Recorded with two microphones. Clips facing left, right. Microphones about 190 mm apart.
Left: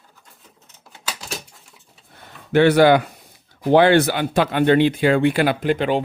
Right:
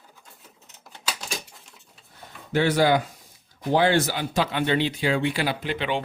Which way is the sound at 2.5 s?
65° left (ahead or behind).